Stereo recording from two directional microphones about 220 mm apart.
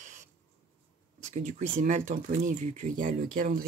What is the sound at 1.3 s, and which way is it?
Speech, 35° right (ahead or behind).